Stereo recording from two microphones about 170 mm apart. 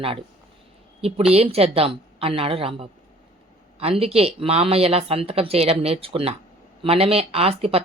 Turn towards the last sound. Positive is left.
turn(degrees=-35)  # may be behind; listen again after turning